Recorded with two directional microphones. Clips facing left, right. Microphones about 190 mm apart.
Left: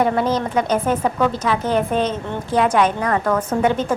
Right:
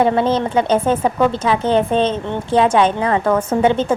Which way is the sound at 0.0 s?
25° right (ahead or behind).